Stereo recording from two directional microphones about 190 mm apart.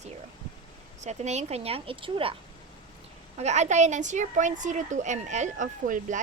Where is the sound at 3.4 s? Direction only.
35° right (ahead or behind).